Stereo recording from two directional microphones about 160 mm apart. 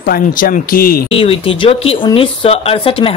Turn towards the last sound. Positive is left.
turn(degrees=35)  # may be behind; listen again after turning